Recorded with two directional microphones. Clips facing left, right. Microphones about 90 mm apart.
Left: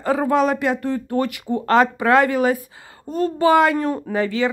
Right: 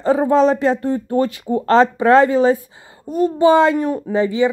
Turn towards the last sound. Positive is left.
turn(degrees=-20)  # may be behind; listen again after turning